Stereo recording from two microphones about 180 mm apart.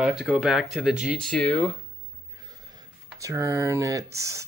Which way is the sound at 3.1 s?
15° right (ahead or behind).